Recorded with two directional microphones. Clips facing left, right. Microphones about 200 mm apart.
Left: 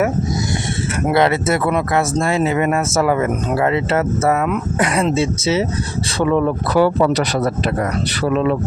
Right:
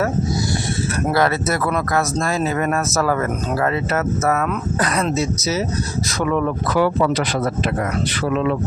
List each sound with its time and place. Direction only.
1.1 s speech: 25° left (ahead or behind)
4.4 s speech: 15° left (ahead or behind)
5.1 s speech: 30° left (ahead or behind)